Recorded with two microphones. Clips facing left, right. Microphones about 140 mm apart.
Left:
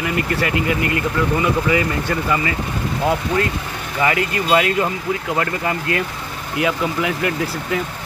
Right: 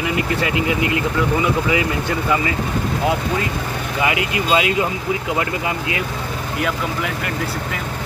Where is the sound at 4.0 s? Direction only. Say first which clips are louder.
Left 2 dB; 15° right (ahead or behind).